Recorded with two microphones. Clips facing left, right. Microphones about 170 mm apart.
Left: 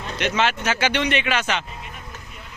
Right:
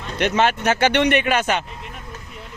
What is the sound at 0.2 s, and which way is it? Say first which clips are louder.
A man's voice: right 4 dB; 50° right (ahead or behind).